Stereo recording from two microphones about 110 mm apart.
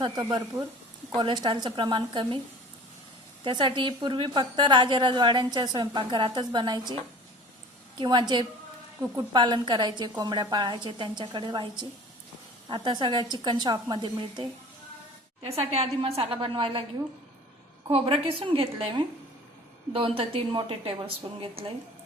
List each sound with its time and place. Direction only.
0.0 s a woman's voice: 40° right (ahead or behind)
3.4 s a woman's voice: 45° right (ahead or behind)
7.9 s a woman's voice: 40° right (ahead or behind)
15.4 s a woman's voice: 65° right (ahead or behind)
17.8 s a woman's voice: 55° right (ahead or behind)
19.9 s a woman's voice: 55° right (ahead or behind)